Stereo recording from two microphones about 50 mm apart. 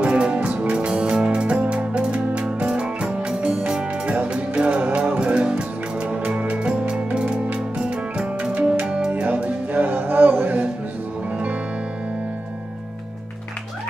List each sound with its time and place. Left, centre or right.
0.0 s music: right
9.1 s music: right